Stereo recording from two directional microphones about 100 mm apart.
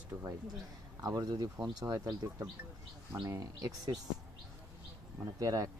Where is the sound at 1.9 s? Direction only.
15° right (ahead or behind).